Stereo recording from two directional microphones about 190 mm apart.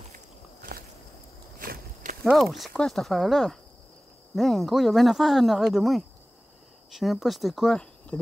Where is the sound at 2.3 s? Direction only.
Centre (ahead or behind).